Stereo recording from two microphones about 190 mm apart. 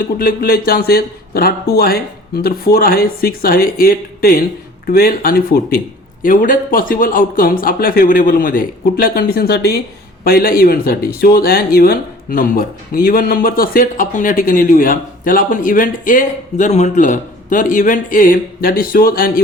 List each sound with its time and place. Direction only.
0.0 s speech: 50° left (ahead or behind)